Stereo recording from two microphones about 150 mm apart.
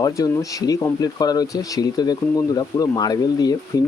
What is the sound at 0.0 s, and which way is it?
Speech, 20° left (ahead or behind).